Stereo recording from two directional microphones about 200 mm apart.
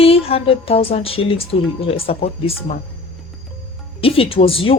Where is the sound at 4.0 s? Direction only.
30° left (ahead or behind).